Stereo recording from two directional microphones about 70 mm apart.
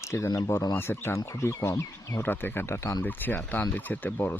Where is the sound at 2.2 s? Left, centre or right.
Left.